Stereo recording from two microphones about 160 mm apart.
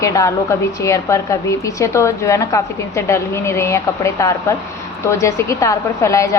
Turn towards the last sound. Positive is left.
turn(degrees=20)  # may be behind; listen again after turning